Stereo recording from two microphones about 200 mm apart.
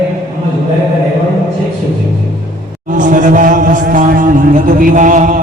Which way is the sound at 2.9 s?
40° right (ahead or behind).